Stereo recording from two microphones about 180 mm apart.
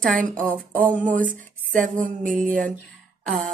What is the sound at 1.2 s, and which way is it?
Speech, 50° right (ahead or behind).